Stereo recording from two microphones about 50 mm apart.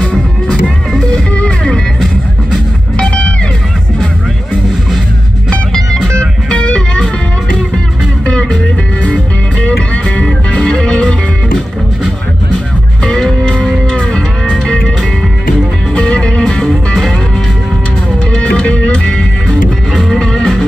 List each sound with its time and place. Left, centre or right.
0.0 s music: centre
3.0 s music: left
5.5 s music: centre
9.0 s music: left
13.0 s music: centre
15.9 s music: centre
18.3 s music: left
19.9 s music: centre